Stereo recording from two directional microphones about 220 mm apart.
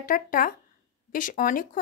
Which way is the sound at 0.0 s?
40° left (ahead or behind).